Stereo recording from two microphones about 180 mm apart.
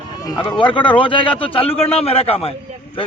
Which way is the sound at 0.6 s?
25° left (ahead or behind).